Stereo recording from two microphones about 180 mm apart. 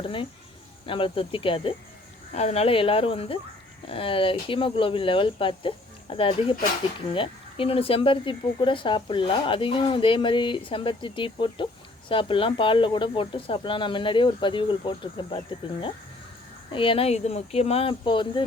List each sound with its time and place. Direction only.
0.0 s speech: 30° left (ahead or behind)
16.7 s speech: 30° left (ahead or behind)